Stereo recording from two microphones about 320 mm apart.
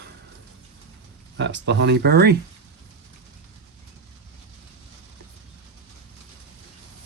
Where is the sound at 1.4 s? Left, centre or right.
Right.